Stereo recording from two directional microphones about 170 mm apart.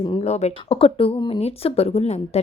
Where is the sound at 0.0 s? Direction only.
35° left (ahead or behind).